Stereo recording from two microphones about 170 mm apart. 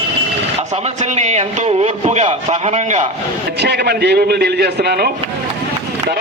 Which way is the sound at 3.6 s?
75° right (ahead or behind).